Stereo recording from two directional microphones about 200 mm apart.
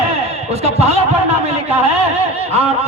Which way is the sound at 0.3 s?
30° right (ahead or behind).